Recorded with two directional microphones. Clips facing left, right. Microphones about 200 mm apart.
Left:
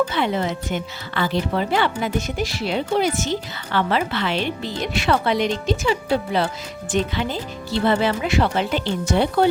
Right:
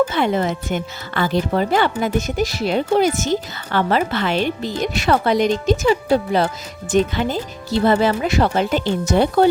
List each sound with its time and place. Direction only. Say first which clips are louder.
0.1 s speech: right 3 dB; 45° right (ahead or behind)